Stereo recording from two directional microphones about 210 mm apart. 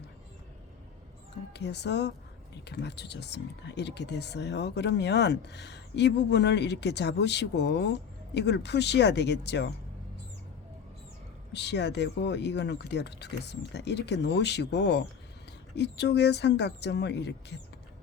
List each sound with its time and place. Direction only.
1.5 s speech: 55° left (ahead or behind)
11.5 s speech: 55° left (ahead or behind)